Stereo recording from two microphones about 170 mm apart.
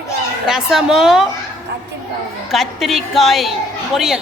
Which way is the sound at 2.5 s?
Centre (ahead or behind).